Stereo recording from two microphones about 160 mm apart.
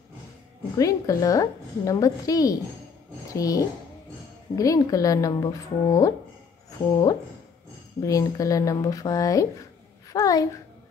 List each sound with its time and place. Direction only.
0.7 s a woman's voice: 20° left (ahead or behind)
8.0 s a woman's voice: 20° left (ahead or behind)